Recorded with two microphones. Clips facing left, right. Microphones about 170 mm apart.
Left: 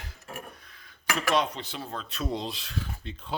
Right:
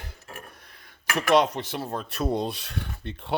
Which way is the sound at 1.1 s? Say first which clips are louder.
Right 6 dB; 75° right (ahead or behind).